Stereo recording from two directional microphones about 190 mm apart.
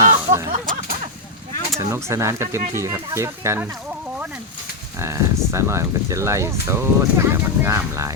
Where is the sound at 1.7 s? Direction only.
15° right (ahead or behind).